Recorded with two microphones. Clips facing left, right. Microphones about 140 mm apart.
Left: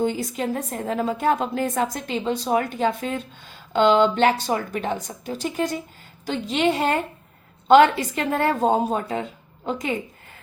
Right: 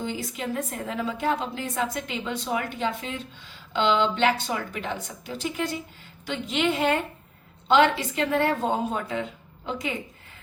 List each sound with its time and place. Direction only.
0.0 s a woman's voice: 45° left (ahead or behind)